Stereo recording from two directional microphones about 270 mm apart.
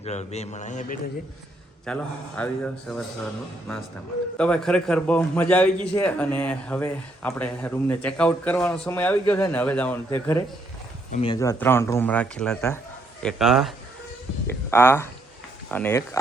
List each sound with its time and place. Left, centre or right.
0.0 s a man's voice: left
1.8 s speech: centre
4.4 s speech: centre
11.1 s a man's voice: centre